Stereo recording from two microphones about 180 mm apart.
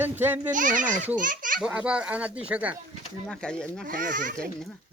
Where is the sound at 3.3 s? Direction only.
5° left (ahead or behind).